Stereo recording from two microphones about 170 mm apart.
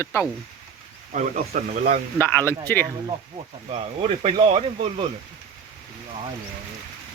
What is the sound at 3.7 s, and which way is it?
Speech, 35° right (ahead or behind).